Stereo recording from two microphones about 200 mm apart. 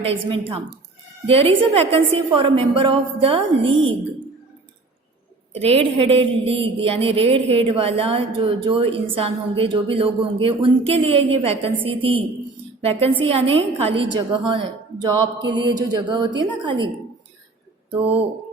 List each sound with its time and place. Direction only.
0.0 s a woman's voice: 30° right (ahead or behind)
5.6 s a woman's voice: 30° right (ahead or behind)
18.0 s a woman's voice: 30° right (ahead or behind)